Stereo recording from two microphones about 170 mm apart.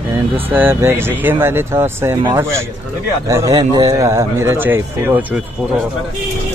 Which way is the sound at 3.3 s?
20° right (ahead or behind).